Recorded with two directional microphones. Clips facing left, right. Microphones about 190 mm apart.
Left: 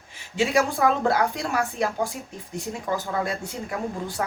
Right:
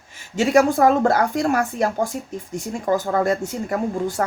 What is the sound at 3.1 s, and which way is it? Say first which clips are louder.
A woman's voice: right 8 dB; 45° right (ahead or behind).